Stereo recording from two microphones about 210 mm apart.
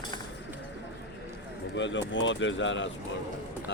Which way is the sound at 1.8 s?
60° left (ahead or behind).